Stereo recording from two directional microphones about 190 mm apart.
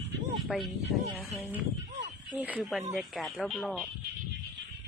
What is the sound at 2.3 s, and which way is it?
Speech, 5° right (ahead or behind).